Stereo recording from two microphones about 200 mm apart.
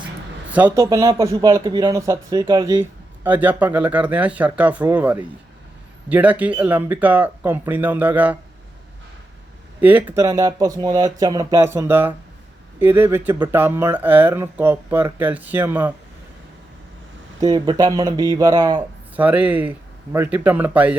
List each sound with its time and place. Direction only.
0.5 s speech: 10° right (ahead or behind)
9.8 s speech: 10° right (ahead or behind)
17.4 s speech: 20° right (ahead or behind)
19.1 s speech: 10° right (ahead or behind)